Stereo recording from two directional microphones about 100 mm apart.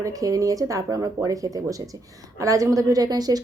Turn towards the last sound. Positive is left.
turn(degrees=-40)  # may be behind; listen again after turning